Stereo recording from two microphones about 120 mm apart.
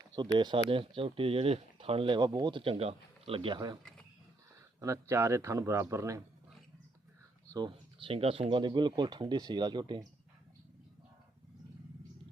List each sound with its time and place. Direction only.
0.1 s speech: 40° right (ahead or behind)
4.8 s speech: 25° right (ahead or behind)
7.9 s speech: 50° right (ahead or behind)